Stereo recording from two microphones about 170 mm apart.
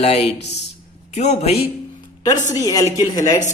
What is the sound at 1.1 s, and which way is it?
Speech, 40° left (ahead or behind).